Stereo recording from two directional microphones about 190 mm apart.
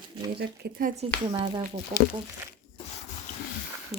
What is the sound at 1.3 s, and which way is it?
Speech, 20° right (ahead or behind).